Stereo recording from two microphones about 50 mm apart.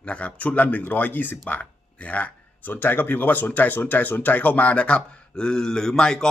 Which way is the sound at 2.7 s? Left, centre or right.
Left.